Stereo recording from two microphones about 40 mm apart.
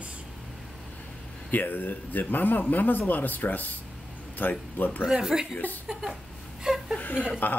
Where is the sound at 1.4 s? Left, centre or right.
Left.